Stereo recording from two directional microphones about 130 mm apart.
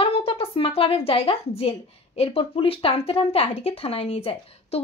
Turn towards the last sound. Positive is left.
turn(degrees=50)  # may be behind; listen again after turning